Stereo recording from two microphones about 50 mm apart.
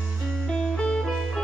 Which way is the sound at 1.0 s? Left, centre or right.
Centre.